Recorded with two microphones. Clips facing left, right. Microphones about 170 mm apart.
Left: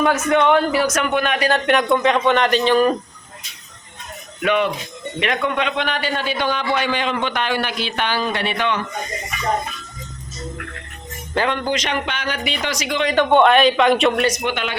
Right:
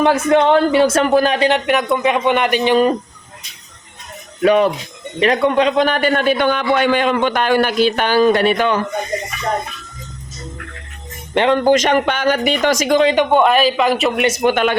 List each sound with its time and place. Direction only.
0.0 s speech: 30° right (ahead or behind)
1.6 s speech: 5° right (ahead or behind)
4.4 s a man's voice: 40° right (ahead or behind)
11.3 s speech: 30° right (ahead or behind)
11.6 s a man's voice: 45° right (ahead or behind)
13.3 s speech: 5° right (ahead or behind)
14.2 s speech: 25° right (ahead or behind)
14.4 s a man's voice: 50° right (ahead or behind)